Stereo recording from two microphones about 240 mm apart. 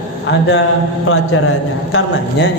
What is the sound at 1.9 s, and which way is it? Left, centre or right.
Speech, left.